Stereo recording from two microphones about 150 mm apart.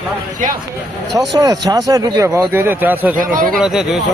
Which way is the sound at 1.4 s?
25° right (ahead or behind).